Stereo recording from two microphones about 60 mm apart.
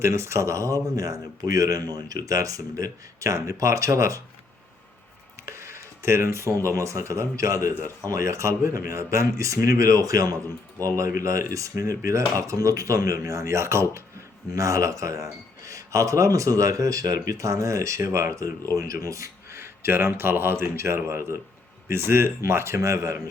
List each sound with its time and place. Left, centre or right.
0.0 s speech: right
5.5 s speech: right
10.9 s speech: right
14.5 s speech: right
19.5 s speech: right